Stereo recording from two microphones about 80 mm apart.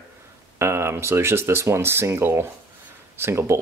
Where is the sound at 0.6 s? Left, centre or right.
Right.